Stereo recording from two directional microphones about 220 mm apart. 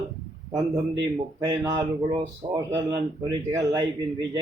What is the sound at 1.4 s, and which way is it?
A man's voice, 15° right (ahead or behind).